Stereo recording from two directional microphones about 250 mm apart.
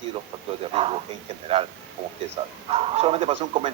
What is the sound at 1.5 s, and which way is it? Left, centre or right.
Speech, right.